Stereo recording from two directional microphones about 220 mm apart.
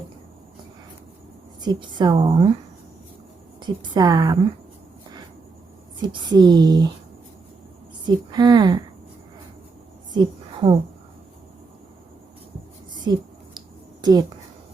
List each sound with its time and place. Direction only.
1.6 s a woman's voice: 20° right (ahead or behind)
3.6 s a woman's voice: 20° right (ahead or behind)
6.1 s a woman's voice: 20° right (ahead or behind)
8.0 s a woman's voice: 20° right (ahead or behind)
10.2 s a woman's voice: 20° right (ahead or behind)
13.1 s a woman's voice: 20° right (ahead or behind)